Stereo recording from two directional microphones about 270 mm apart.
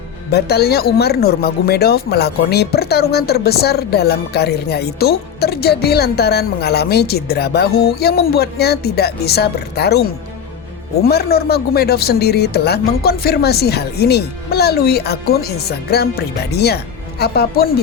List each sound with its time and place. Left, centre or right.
0.3 s speech: left